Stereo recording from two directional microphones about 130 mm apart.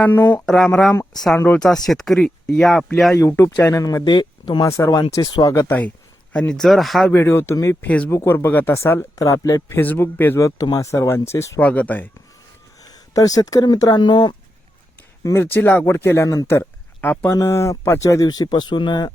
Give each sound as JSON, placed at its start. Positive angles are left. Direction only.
{"t": 0.0, "sound": "speech", "side_deg": 15}
{"t": 0.4, "sound": "speech", "side_deg": 5}
{"t": 3.2, "sound": "speech", "side_deg": 25}
{"t": 4.0, "sound": "speech", "side_deg": 35}
{"t": 6.3, "sound": "speech", "side_deg": 5}
{"t": 7.1, "sound": "speech", "side_deg": 20}
{"t": 11.6, "sound": "speech", "side_deg": 10}
{"t": 12.8, "sound": "speech", "side_deg": 30}
{"t": 15.2, "sound": "speech", "side_deg": 20}